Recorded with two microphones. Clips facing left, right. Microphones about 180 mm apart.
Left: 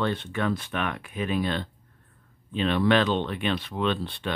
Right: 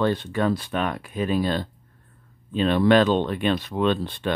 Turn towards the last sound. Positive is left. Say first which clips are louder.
# right 5 dB
turn(degrees=-45)  # may be behind; listen again after turning